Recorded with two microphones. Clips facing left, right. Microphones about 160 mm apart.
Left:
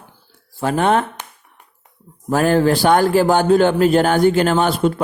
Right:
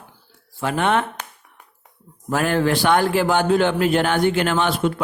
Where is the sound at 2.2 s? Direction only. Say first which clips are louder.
Left 5 dB; 35° left (ahead or behind).